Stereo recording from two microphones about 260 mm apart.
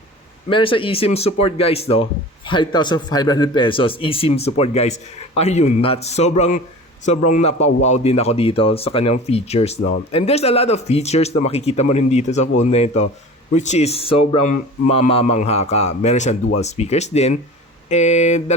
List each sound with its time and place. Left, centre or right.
0.5 s speech: centre